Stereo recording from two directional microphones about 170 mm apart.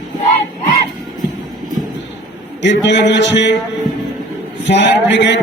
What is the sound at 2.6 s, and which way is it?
Speech, 90° left.